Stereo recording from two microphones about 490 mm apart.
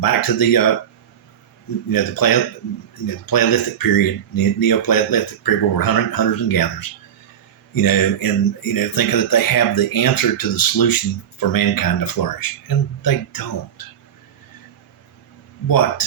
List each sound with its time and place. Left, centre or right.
0.0 s speech: left
1.9 s speech: left
15.6 s speech: left